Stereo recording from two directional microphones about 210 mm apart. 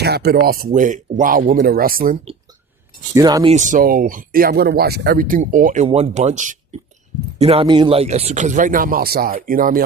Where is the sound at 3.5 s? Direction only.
35° right (ahead or behind).